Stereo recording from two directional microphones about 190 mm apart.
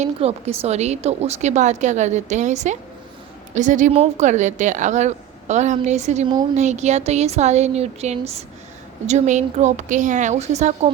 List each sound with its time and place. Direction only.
0.0 s a woman's voice: 35° right (ahead or behind)